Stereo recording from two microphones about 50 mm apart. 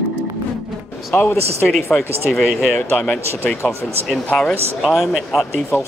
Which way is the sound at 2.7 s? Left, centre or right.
Left.